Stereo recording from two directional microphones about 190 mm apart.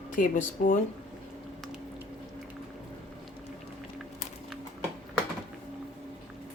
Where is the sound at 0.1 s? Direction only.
45° left (ahead or behind).